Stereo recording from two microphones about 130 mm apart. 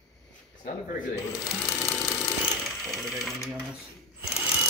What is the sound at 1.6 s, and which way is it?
Sewing machine, 5° left (ahead or behind).